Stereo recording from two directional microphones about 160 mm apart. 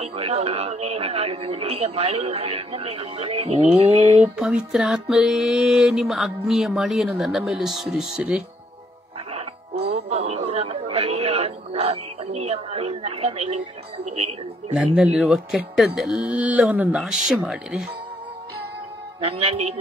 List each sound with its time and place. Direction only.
0.0 s speech: 40° right (ahead or behind)
4.2 s music: 5° right (ahead or behind)
9.8 s chatter: 40° right (ahead or behind)
14.7 s speech: 10° right (ahead or behind)
17.5 s music: 5° right (ahead or behind)
19.2 s speech: 40° right (ahead or behind)